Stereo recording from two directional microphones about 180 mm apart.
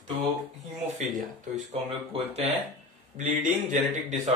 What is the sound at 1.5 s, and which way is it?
Speech, 35° right (ahead or behind).